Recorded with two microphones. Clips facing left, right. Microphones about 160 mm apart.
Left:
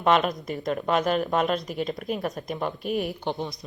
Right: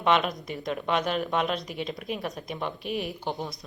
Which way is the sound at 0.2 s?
Centre (ahead or behind).